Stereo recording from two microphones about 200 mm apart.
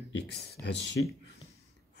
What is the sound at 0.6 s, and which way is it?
Speech, 55° left (ahead or behind).